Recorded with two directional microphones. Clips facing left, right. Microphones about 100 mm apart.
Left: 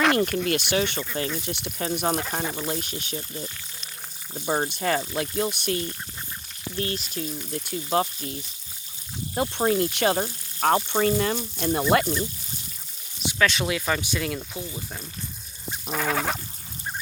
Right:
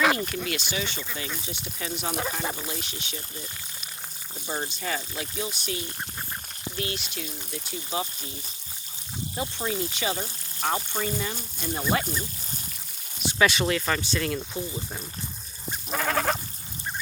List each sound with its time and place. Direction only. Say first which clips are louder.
0.2 s speech: left 7 dB; 55° left (ahead or behind)
1.4 s speech: left 5 dB; 65° left (ahead or behind)
1.8 s speech: left 4 dB; 45° left (ahead or behind)
4.4 s speech: left 7 dB; 50° left (ahead or behind)
6.7 s speech: left 4 dB; 40° left (ahead or behind)
7.6 s speech: left 7 dB; 55° left (ahead or behind)
13.4 s goat: right 1 dB; 5° right (ahead or behind)
13.7 s speech: even; 10° left (ahead or behind)
15.9 s goat: even; centre (ahead or behind)